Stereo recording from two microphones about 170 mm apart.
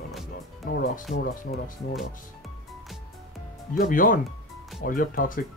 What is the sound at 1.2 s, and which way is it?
Speech, 60° left (ahead or behind).